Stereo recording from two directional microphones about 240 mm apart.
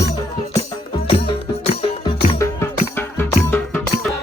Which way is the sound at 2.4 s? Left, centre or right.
Centre.